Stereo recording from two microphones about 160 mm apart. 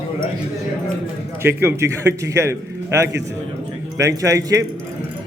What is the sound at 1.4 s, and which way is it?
A man's voice, 15° right (ahead or behind).